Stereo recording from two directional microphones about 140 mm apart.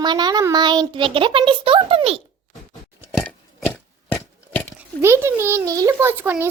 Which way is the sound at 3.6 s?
10° left (ahead or behind).